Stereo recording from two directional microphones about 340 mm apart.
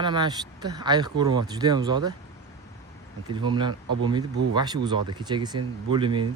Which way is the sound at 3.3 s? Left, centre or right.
Centre.